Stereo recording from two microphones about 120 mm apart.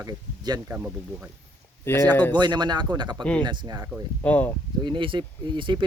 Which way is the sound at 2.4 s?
35° right (ahead or behind).